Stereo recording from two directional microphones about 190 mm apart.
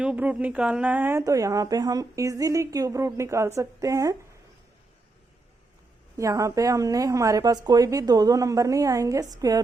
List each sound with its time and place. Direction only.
0.0 s a woman's voice: 5° right (ahead or behind)
6.1 s a woman's voice: 15° right (ahead or behind)